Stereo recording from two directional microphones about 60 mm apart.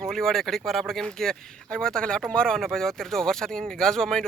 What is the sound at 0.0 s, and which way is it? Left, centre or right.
Speech, centre.